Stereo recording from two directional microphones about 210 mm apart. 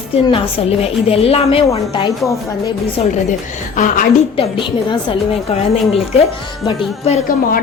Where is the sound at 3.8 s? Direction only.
35° left (ahead or behind).